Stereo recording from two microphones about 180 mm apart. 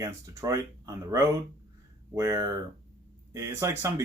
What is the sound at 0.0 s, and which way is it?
Speech, 15° right (ahead or behind).